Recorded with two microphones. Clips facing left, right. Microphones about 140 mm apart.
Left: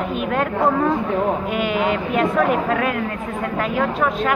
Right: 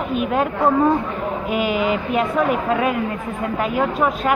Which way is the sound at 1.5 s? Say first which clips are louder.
Even; 5° right (ahead or behind).